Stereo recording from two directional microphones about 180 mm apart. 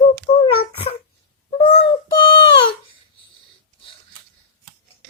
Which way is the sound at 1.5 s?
30° left (ahead or behind).